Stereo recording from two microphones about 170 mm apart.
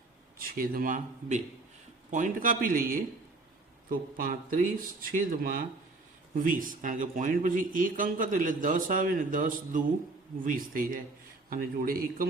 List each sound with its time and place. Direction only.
0.3 s speech: 60° right (ahead or behind)